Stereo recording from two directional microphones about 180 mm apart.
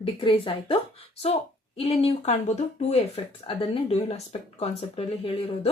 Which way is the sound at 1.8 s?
35° left (ahead or behind).